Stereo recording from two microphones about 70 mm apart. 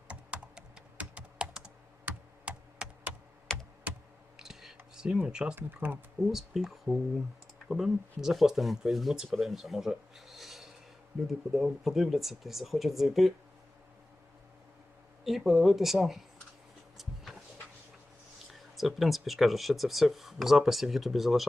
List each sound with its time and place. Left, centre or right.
0.1 s computer keyboard: centre
3.5 s computer keyboard: centre
4.4 s whispering: centre
4.9 s speech: centre
5.5 s speech: right
6.2 s speech: centre
15.2 s speech: centre
18.5 s speech: centre